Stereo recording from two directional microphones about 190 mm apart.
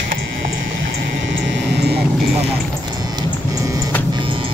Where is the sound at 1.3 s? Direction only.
65° right (ahead or behind).